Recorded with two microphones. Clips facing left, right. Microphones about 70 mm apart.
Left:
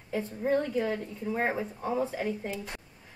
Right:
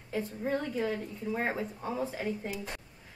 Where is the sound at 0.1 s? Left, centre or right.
Centre.